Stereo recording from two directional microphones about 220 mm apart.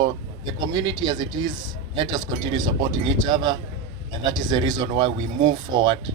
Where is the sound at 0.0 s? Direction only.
20° right (ahead or behind).